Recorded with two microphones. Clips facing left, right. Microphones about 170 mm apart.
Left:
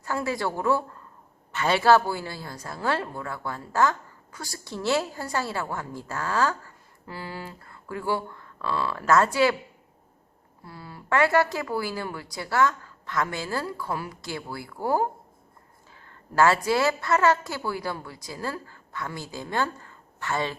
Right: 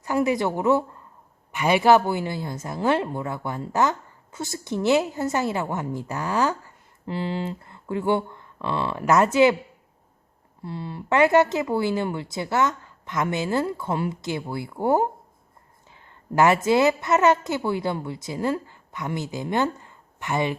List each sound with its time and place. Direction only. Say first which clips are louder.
0.0 s a woman's voice: right 6 dB; 20° right (ahead or behind)
10.6 s a woman's voice: right 9 dB; 25° right (ahead or behind)